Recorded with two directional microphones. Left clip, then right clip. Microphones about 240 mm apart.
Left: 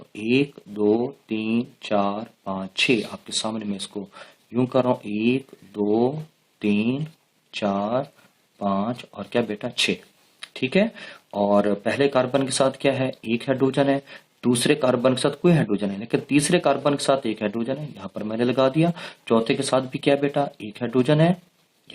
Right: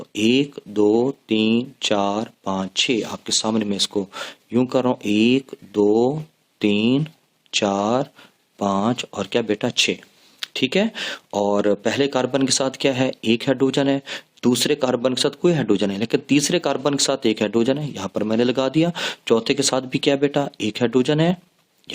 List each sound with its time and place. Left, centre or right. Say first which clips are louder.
0.1 s speech: right 3 dB; right